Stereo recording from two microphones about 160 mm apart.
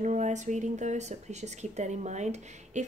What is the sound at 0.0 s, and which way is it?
Speech, 45° right (ahead or behind).